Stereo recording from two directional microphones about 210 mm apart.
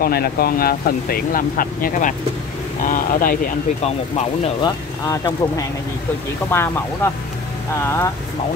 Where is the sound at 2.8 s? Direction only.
40° left (ahead or behind).